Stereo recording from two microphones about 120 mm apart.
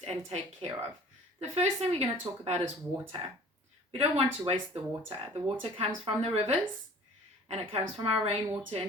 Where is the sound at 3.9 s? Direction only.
55° right (ahead or behind).